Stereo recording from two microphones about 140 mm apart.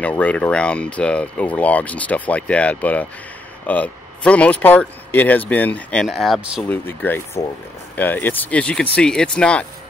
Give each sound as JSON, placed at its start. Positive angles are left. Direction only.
{"t": 0.2, "sound": "speech", "side_deg": 10}
{"t": 6.7, "sound": "speech", "side_deg": 15}